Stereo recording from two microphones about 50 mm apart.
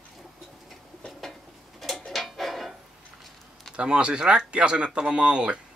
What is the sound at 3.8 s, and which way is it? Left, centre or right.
Speech, right.